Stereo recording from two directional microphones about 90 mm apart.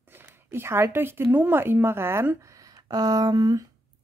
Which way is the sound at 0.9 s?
25° right (ahead or behind).